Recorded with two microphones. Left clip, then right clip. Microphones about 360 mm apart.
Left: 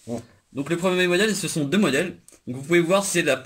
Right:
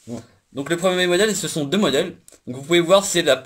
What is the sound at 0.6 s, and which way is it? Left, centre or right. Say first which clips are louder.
Speech: right 3 dB; right.